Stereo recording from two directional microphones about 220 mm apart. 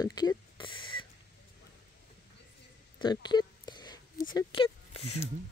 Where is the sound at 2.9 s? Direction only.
20° left (ahead or behind).